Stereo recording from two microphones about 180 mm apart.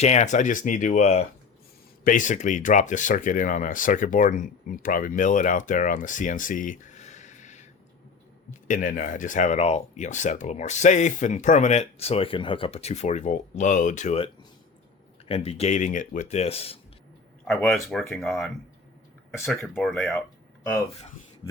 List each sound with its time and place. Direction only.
0.0 s speech: 40° left (ahead or behind)
15.3 s speech: 35° left (ahead or behind)
17.4 s speech: centre (ahead or behind)